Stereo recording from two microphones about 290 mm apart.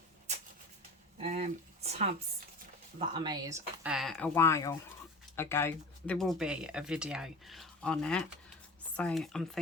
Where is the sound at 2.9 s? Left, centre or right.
Centre.